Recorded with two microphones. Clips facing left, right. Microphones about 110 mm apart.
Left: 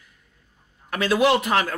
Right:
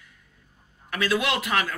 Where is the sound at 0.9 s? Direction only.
30° left (ahead or behind).